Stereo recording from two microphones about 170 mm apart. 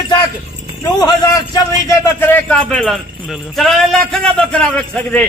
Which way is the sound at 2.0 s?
10° left (ahead or behind).